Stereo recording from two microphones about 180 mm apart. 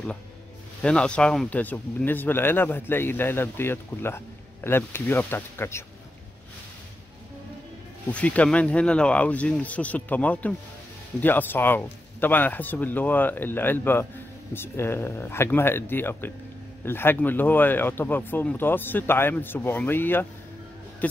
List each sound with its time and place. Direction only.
0.8 s speech: 5° left (ahead or behind)
8.1 s speech: 5° left (ahead or behind)